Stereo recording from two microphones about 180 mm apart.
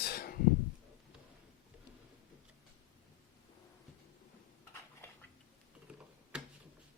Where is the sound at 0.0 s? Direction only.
60° left (ahead or behind).